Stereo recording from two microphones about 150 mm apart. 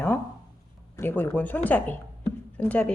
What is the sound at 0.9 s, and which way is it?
A woman's voice, 15° left (ahead or behind).